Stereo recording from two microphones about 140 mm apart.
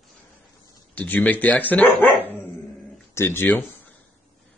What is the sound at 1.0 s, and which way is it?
Speech, 10° left (ahead or behind).